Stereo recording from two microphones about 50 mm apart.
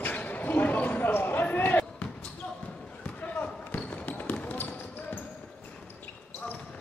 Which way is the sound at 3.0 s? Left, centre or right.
Left.